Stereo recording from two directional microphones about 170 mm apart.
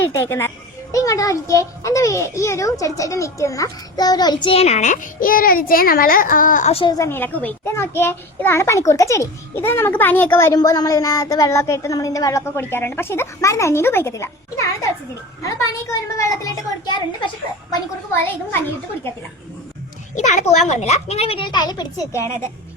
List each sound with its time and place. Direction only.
0.0 s a child's voice: 15° left (ahead or behind); by 6.9 s 35° left (ahead or behind)
6.9 s a child's voice: 15° left (ahead or behind)
20.1 s a woman's voice: 45° left (ahead or behind); by 22.3 s 20° left (ahead or behind)